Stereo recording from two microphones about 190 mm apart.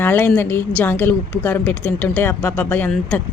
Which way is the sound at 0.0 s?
10° left (ahead or behind).